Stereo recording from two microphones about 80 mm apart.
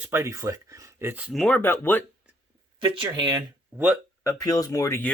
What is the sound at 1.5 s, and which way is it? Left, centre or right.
Speech, left.